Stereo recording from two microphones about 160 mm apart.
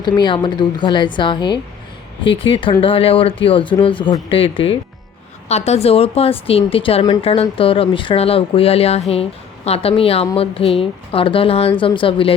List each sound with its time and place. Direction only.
0.0 s a woman's voice: 25° left (ahead or behind)